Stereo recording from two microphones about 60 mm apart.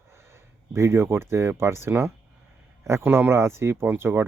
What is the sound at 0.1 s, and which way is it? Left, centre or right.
Speech, right.